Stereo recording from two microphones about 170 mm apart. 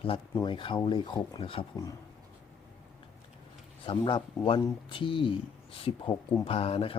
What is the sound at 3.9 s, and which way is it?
Speech, 30° left (ahead or behind).